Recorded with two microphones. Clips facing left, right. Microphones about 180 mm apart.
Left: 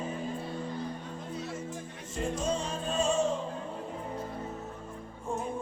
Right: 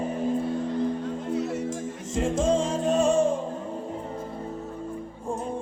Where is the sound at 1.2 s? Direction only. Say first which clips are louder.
Right 10 dB; 70° right (ahead or behind).